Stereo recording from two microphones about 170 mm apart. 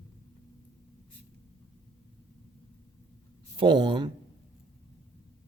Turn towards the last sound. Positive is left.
turn(degrees=-25)  # may be behind; listen again after turning